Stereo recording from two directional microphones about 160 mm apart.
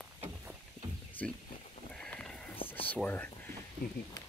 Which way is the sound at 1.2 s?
10° left (ahead or behind).